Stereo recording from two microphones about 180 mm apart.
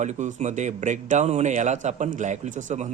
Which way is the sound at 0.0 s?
40° right (ahead or behind).